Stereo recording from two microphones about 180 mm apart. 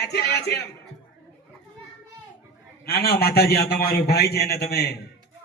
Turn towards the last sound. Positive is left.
turn(degrees=60)  # may be behind; listen again after turning